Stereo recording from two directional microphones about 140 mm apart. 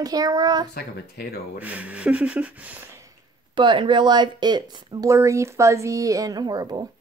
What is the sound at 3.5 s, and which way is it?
Speech, 35° right (ahead or behind).